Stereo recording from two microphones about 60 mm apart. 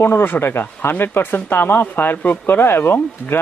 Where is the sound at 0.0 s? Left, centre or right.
Left.